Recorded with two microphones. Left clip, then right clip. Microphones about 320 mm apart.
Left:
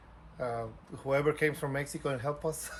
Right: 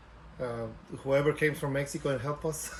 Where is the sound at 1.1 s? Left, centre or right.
Centre.